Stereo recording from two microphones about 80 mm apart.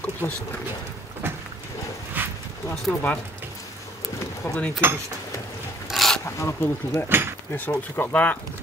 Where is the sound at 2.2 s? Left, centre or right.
Right.